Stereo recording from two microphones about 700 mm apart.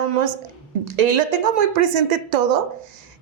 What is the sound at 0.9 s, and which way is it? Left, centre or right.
Speech, right.